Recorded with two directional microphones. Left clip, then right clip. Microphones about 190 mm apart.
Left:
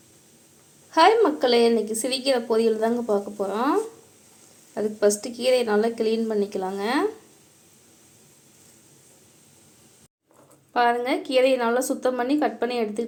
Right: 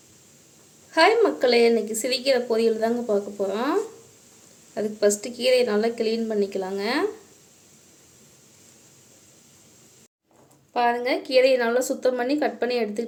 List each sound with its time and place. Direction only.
0.9 s a woman's voice: 5° right (ahead or behind)
10.8 s a woman's voice: 5° right (ahead or behind)